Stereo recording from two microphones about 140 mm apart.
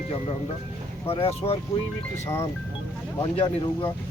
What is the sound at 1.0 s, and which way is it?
Speech, 45° left (ahead or behind).